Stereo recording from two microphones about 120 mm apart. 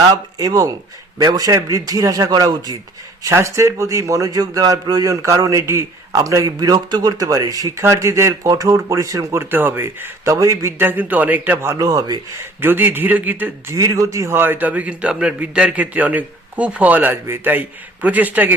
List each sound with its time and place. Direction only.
0.1 s a man's voice: 30° right (ahead or behind)
11.8 s a man's voice: 30° right (ahead or behind)
12.4 s a man's voice: 20° right (ahead or behind)
13.7 s a man's voice: 25° right (ahead or behind)